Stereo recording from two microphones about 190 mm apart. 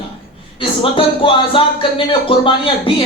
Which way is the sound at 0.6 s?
25° left (ahead or behind).